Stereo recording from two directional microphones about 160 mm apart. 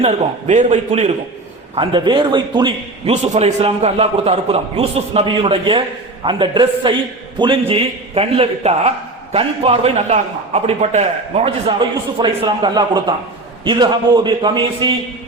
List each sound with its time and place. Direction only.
0.0 s a man's voice: 40° right (ahead or behind)
1.7 s a man's voice: 30° right (ahead or behind)
3.1 s a man's voice: 40° right (ahead or behind)